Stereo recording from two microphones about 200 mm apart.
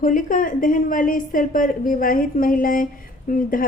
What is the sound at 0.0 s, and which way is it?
Speech, 40° left (ahead or behind).